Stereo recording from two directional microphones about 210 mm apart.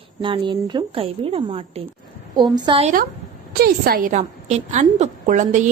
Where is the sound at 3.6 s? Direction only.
45° right (ahead or behind).